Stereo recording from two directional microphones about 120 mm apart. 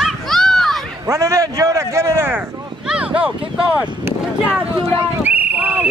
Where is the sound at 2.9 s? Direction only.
10° right (ahead or behind).